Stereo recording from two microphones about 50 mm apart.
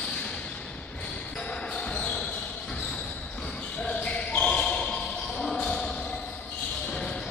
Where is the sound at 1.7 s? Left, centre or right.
Centre.